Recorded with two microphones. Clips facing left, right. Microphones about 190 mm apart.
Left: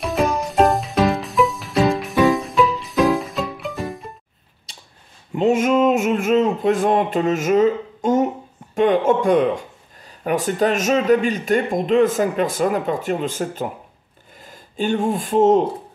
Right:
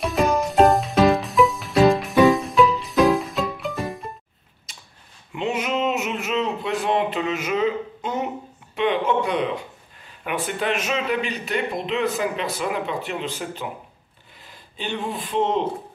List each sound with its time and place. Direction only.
0.0 s music: centre (ahead or behind)
4.7 s a sound: 30° left (ahead or behind)
5.3 s speech: 45° left (ahead or behind)